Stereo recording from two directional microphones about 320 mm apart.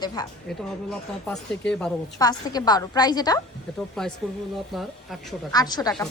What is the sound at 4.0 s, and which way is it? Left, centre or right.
Speech, centre.